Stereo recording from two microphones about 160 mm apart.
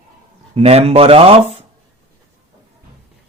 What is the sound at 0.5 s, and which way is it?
Speech, 40° right (ahead or behind).